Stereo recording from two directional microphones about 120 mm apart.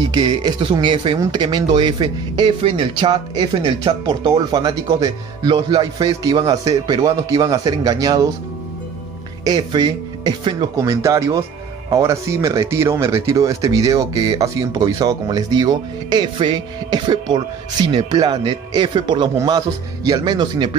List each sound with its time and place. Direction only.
0.1 s speech: 35° right (ahead or behind)
9.4 s speech: 40° right (ahead or behind)
10.8 s speech: 30° right (ahead or behind)